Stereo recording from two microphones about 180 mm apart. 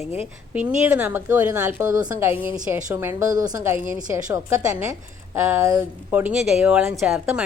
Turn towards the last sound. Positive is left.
turn(degrees=0)  # may be behind; listen again after turning